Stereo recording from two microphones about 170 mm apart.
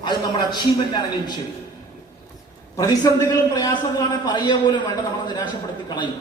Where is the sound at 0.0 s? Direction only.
25° left (ahead or behind).